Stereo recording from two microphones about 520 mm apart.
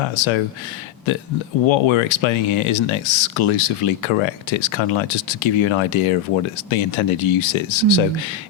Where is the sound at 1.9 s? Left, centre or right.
Left.